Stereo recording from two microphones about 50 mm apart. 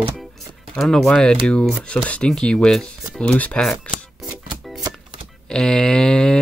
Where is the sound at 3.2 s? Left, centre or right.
Left.